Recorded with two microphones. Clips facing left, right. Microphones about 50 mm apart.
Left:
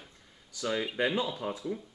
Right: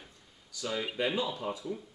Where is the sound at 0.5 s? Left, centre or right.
Left.